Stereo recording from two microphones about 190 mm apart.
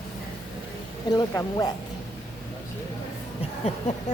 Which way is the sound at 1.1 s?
20° left (ahead or behind).